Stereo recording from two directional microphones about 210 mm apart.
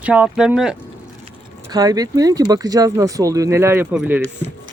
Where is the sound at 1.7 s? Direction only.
15° right (ahead or behind).